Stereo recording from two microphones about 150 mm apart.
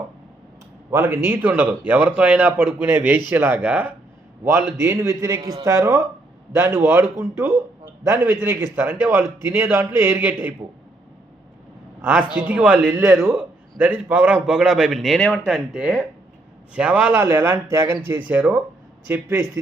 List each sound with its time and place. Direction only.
0.9 s a man's voice: 20° right (ahead or behind)
12.0 s a man's voice: 10° right (ahead or behind)